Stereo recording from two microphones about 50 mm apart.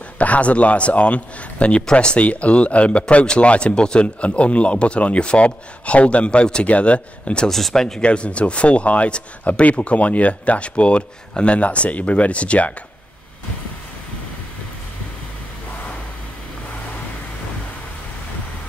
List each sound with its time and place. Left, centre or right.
0.2 s speech: left
7.4 s speech: centre
8.0 s speech: left